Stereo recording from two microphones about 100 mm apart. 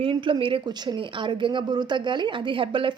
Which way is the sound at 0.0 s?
60° right (ahead or behind).